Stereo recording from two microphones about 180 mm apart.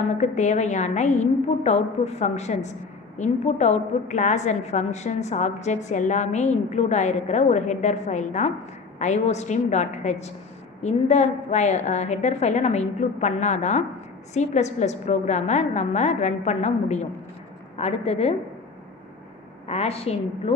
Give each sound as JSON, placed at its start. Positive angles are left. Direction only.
{"t": 0.1, "sound": "a woman's voice", "side_deg": 40}
{"t": 19.6, "sound": "a woman's voice", "side_deg": 35}